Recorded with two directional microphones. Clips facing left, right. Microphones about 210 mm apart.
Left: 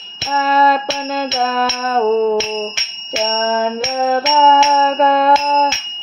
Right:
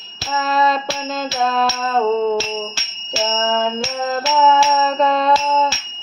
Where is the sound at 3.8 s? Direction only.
20° left (ahead or behind).